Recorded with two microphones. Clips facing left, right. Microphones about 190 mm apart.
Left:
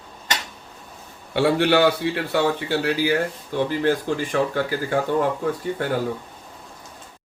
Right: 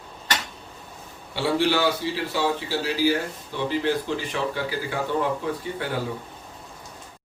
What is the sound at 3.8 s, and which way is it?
Speech, 50° left (ahead or behind).